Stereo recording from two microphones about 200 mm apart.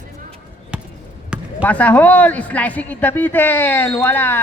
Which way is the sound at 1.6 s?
5° left (ahead or behind).